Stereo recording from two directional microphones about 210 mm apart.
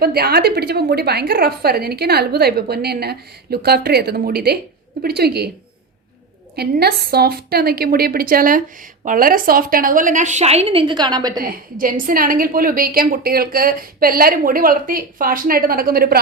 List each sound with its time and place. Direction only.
0.0 s a woman's voice: 50° right (ahead or behind)
6.6 s a woman's voice: 50° right (ahead or behind); by 11.3 s 20° right (ahead or behind)
11.3 s a woman's voice: 45° right (ahead or behind)